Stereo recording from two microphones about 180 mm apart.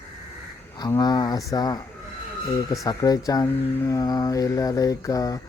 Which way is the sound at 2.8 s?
20° left (ahead or behind).